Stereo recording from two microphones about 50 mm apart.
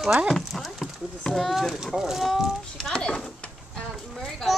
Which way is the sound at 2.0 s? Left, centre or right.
Centre.